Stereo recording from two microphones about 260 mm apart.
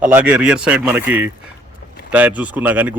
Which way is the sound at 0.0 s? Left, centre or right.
Centre.